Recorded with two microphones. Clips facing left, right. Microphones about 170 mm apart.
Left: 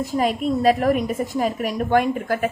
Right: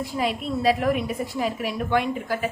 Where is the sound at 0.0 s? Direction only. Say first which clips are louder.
Left 5 dB; 45° left (ahead or behind).